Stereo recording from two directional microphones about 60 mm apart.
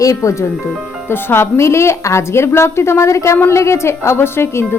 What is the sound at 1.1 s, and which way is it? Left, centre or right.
A woman's voice, left.